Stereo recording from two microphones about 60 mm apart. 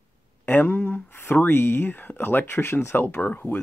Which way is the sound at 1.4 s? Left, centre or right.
Left.